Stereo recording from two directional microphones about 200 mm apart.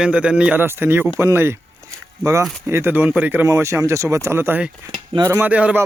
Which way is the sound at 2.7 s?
10° right (ahead or behind).